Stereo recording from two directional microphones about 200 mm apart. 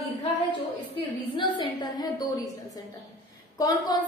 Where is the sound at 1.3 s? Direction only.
20° left (ahead or behind).